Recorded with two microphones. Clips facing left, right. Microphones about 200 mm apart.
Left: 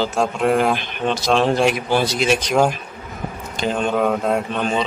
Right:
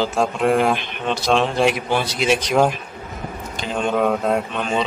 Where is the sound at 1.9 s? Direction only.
40° left (ahead or behind).